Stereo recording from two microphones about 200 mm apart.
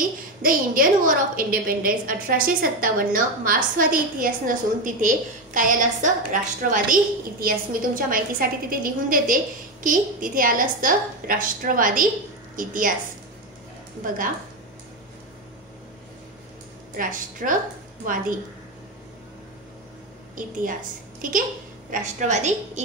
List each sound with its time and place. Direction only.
0.4 s a woman's voice: 45° right (ahead or behind)
14.0 s a woman's voice: 45° right (ahead or behind)
16.9 s a woman's voice: 45° right (ahead or behind)
21.2 s a woman's voice: 40° right (ahead or behind)